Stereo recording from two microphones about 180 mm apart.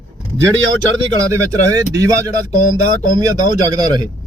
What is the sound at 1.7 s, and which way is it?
Speech, 20° right (ahead or behind).